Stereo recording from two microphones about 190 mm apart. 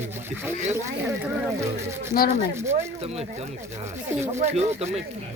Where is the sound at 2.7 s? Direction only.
35° right (ahead or behind).